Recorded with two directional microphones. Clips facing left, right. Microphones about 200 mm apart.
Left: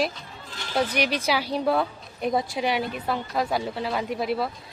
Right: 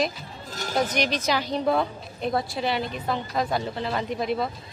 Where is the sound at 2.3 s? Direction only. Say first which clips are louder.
Left 1 dB; 15° left (ahead or behind).